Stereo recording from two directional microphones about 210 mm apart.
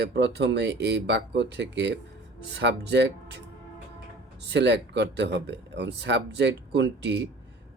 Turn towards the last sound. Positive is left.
turn(degrees=-55)  # may be behind; listen again after turning